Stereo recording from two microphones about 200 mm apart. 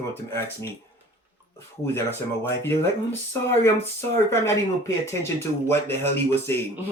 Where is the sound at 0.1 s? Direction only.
10° left (ahead or behind).